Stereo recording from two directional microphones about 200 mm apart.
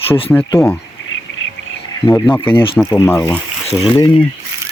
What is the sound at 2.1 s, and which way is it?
Speech, 15° left (ahead or behind).